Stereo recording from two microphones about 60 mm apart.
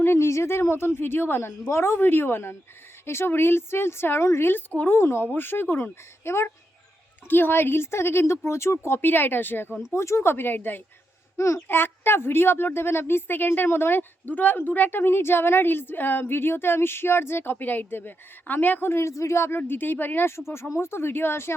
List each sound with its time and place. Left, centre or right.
0.0 s a woman's voice: left
9.9 s speech: left
10.3 s a woman's voice: left
11.3 s speech: left
11.7 s a woman's voice: left